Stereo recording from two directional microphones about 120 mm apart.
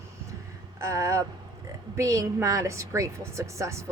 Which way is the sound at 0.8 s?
25° right (ahead or behind).